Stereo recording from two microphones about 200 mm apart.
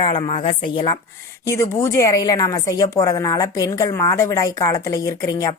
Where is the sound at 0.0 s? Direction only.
25° left (ahead or behind).